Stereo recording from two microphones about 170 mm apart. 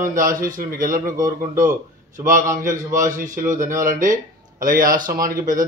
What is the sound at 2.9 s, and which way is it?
A man's voice, 50° right (ahead or behind).